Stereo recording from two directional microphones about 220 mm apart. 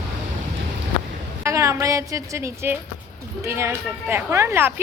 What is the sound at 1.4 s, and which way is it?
A woman's voice, 15° right (ahead or behind).